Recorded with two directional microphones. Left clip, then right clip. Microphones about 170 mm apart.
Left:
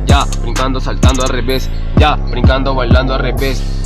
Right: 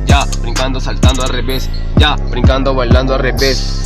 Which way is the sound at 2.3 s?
15° right (ahead or behind).